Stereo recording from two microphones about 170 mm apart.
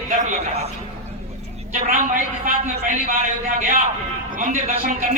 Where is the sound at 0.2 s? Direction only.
40° right (ahead or behind).